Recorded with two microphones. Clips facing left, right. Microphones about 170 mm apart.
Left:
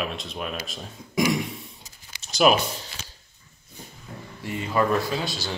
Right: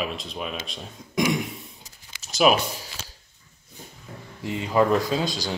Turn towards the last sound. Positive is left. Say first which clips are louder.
# right 3 dB
turn(degrees=-15)  # may be behind; listen again after turning